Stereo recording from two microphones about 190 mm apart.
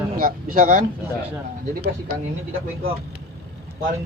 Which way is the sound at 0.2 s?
45° right (ahead or behind).